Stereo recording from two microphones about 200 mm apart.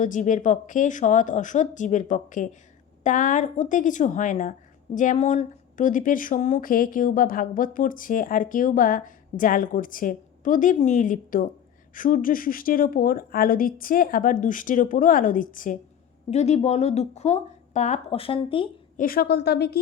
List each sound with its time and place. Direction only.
0.0 s speech: 40° left (ahead or behind)
18.9 s a woman's voice: 45° left (ahead or behind)